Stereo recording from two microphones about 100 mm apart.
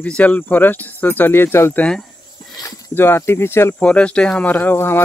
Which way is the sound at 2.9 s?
25° left (ahead or behind).